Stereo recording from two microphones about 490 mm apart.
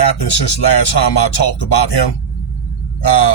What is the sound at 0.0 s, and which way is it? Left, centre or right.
Speech, left.